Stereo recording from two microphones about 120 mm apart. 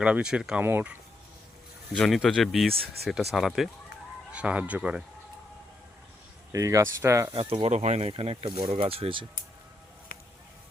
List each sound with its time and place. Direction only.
0.0 s speech: 10° right (ahead or behind)
1.9 s speech: centre (ahead or behind)
6.5 s speech: 25° right (ahead or behind)
7.3 s speech: 55° right (ahead or behind)